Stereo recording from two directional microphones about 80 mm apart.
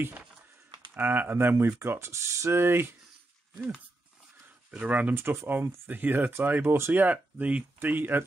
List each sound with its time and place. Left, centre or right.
0.9 s speech: right
4.6 s speech: centre
5.1 s speech: right